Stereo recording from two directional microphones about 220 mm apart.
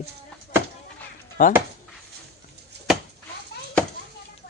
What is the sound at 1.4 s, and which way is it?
Speech, 40° left (ahead or behind).